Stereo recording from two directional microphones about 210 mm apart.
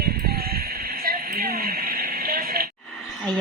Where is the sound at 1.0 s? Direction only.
45° right (ahead or behind).